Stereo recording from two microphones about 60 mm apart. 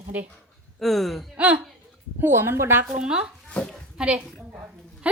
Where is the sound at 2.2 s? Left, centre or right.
Right.